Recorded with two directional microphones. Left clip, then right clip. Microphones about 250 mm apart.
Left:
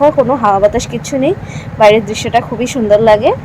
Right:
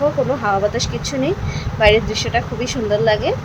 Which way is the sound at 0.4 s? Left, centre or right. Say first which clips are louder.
Left 8 dB; centre.